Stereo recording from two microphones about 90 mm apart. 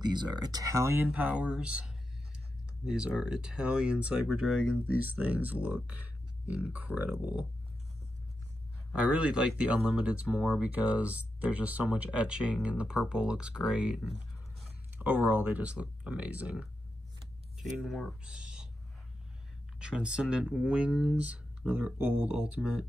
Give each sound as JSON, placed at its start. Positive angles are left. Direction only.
{"t": 0.0, "sound": "speech", "side_deg": -55}
{"t": 1.0, "sound": "speech", "side_deg": -15}
{"t": 8.9, "sound": "speech", "side_deg": -15}
{"t": 15.0, "sound": "speech", "side_deg": -20}
{"t": 19.8, "sound": "speech", "side_deg": -10}